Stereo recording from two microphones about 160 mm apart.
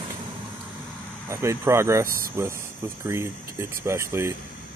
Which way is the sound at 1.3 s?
15° right (ahead or behind).